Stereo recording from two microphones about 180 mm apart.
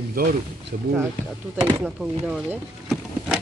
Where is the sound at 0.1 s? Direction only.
55° right (ahead or behind).